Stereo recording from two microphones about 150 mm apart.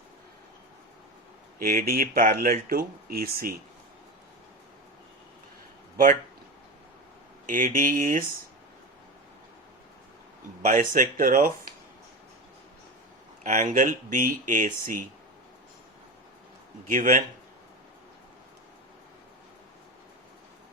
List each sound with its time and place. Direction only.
1.5 s speech: 75° right (ahead or behind)
7.4 s speech: 65° right (ahead or behind)
10.6 s speech: 60° right (ahead or behind)
13.4 s speech: 60° right (ahead or behind)
16.9 s speech: 60° right (ahead or behind)